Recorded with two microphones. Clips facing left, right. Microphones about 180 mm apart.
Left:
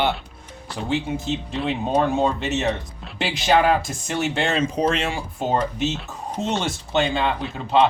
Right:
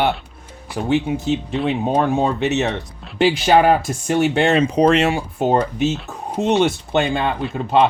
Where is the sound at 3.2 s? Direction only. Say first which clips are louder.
Right 5 dB; 55° right (ahead or behind).